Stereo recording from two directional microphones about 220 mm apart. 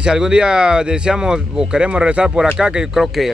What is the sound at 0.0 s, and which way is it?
Speech, 5° right (ahead or behind).